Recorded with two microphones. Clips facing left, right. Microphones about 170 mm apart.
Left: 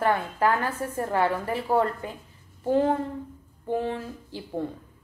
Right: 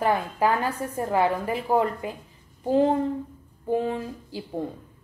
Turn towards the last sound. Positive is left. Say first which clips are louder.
# right 1 dB
turn(degrees=-10)  # may be behind; listen again after turning